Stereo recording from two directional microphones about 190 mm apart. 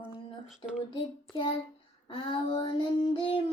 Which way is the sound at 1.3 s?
30° left (ahead or behind).